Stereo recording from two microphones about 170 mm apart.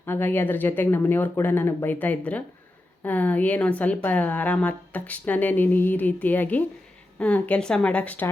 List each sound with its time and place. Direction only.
0.0 s a woman's voice: 10° left (ahead or behind)